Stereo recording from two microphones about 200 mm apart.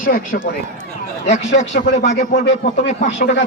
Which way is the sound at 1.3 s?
65° left (ahead or behind).